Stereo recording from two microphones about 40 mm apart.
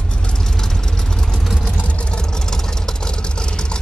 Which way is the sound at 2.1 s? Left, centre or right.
Centre.